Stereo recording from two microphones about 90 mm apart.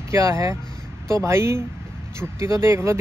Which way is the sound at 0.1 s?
35° right (ahead or behind).